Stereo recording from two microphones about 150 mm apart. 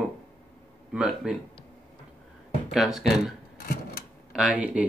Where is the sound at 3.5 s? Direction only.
90° left.